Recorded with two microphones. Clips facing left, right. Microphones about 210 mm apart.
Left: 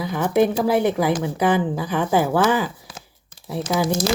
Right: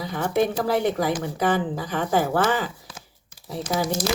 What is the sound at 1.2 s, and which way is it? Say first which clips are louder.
Speech: left 3 dB; 10° left (ahead or behind).